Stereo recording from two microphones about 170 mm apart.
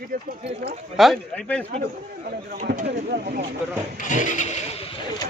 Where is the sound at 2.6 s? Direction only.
55° right (ahead or behind).